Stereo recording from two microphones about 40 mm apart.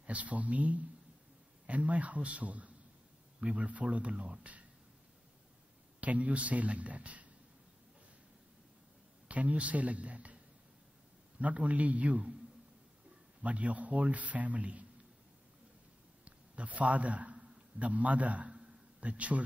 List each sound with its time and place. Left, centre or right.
0.0 s a man's voice: right
5.9 s a man's voice: right
9.3 s a man's voice: right
13.4 s a man's voice: right
16.3 s a man's voice: right
18.5 s a sound: right